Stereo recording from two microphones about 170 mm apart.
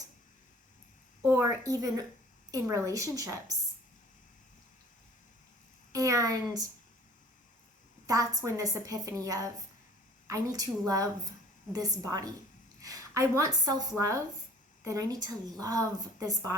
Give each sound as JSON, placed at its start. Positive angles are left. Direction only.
{"t": 1.2, "sound": "a sound", "side_deg": -15}
{"t": 2.5, "sound": "a woman's voice", "side_deg": -20}
{"t": 5.9, "sound": "a woman's voice", "side_deg": -20}
{"t": 8.0, "sound": "a woman's voice", "side_deg": -20}